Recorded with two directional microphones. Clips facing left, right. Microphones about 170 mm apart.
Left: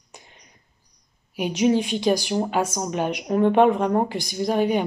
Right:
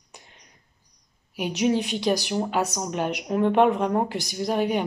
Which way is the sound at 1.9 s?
5° right (ahead or behind).